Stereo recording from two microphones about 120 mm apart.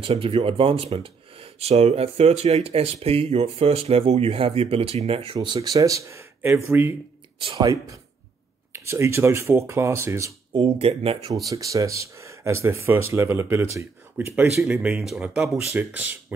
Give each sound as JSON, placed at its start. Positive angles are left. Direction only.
{"t": 0.0, "sound": "speech", "side_deg": -50}
{"t": 7.3, "sound": "speech", "side_deg": -45}
{"t": 7.6, "sound": "speech", "side_deg": -30}
{"t": 10.6, "sound": "speech", "side_deg": -55}
{"t": 11.4, "sound": "speech", "side_deg": -30}
{"t": 15.5, "sound": "speech", "side_deg": -20}